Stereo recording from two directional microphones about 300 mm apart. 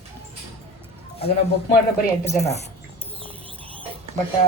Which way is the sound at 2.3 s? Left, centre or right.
Left.